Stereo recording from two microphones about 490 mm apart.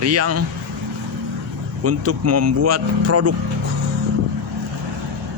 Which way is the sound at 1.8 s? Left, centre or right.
Right.